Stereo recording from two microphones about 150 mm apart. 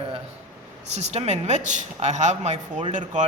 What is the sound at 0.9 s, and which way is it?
Speech, 45° right (ahead or behind).